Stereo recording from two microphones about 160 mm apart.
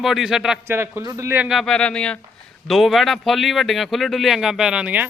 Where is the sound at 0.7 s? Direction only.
15° right (ahead or behind).